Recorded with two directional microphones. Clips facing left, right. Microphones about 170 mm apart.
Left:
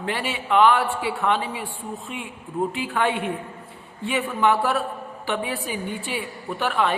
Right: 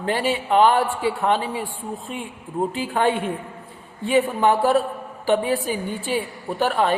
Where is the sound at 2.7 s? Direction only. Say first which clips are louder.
Right 6 dB; 40° right (ahead or behind).